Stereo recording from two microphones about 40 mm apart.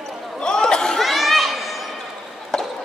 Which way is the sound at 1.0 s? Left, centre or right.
Centre.